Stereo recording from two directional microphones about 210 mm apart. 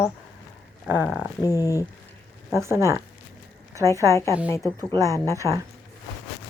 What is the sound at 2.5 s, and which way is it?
Speech, 15° right (ahead or behind).